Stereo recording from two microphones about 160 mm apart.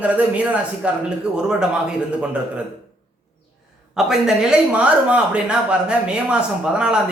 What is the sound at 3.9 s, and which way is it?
A man's voice, 5° right (ahead or behind).